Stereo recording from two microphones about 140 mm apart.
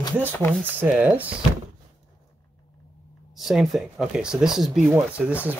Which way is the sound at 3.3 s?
Centre (ahead or behind).